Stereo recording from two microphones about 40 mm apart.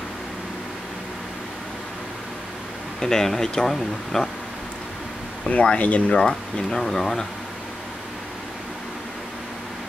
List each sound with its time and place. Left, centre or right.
3.0 s speech: centre
5.5 s speech: left
6.1 s speech: centre